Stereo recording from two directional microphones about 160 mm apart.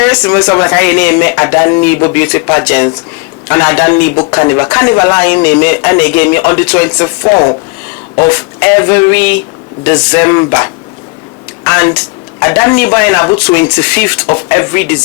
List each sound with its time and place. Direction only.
0.4 s speech: 15° left (ahead or behind)
4.1 s speech: 30° left (ahead or behind)
4.4 s speech: 15° left (ahead or behind)
11.6 s a sound: 15° left (ahead or behind)
12.4 s speech: 15° left (ahead or behind)